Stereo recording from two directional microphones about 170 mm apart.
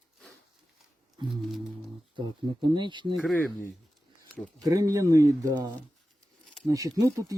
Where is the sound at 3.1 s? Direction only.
5° left (ahead or behind).